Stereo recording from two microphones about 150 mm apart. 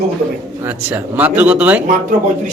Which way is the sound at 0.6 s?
10° right (ahead or behind).